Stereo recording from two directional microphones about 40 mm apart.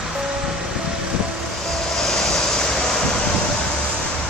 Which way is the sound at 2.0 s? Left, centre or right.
Centre.